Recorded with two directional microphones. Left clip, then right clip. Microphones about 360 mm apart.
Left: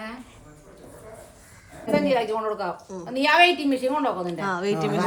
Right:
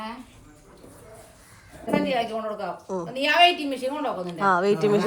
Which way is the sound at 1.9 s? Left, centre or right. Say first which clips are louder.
Left 3 dB; left.